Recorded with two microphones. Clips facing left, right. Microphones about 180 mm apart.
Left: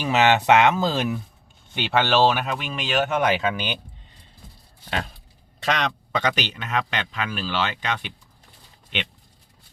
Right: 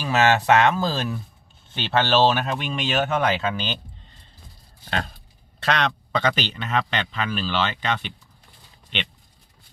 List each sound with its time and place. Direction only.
0.0 s speech: 20° left (ahead or behind)
5.7 s speech: 10° left (ahead or behind)